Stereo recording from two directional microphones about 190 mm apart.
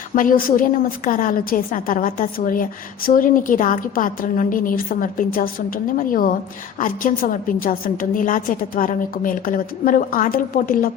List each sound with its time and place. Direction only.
0.2 s a woman's voice: 45° left (ahead or behind)